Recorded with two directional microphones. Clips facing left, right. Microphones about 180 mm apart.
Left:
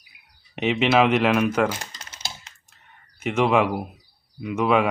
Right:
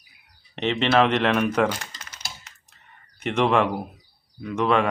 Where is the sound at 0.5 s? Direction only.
10° left (ahead or behind).